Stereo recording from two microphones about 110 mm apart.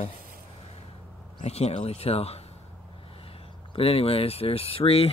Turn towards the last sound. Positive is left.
turn(degrees=60)  # may be behind; listen again after turning